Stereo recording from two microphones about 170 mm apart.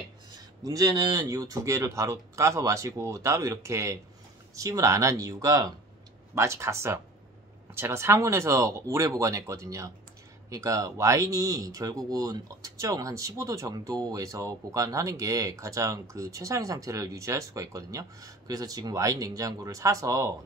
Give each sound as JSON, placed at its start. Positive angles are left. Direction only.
{"t": 0.7, "sound": "speech", "side_deg": -20}